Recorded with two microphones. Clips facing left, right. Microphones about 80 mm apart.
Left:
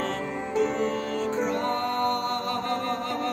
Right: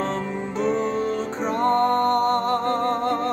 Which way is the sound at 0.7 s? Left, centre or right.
Right.